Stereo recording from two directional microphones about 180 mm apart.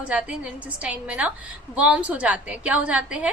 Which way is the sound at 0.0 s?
5° right (ahead or behind).